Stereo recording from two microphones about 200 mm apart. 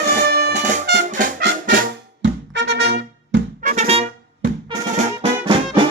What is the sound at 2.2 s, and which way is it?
Music, 60° right (ahead or behind).